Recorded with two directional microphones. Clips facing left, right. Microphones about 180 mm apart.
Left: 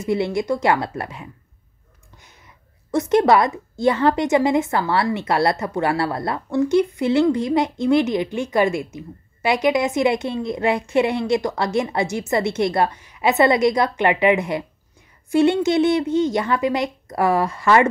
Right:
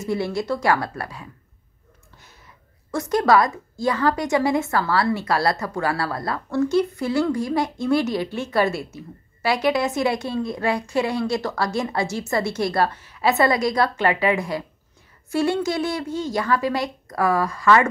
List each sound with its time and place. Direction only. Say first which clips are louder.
0.0 s a woman's voice: left 3 dB; 20° left (ahead or behind)
2.9 s a woman's voice: left 3 dB; 20° left (ahead or behind)